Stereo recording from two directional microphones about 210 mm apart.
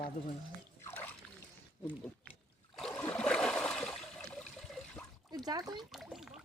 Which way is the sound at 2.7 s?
5° left (ahead or behind).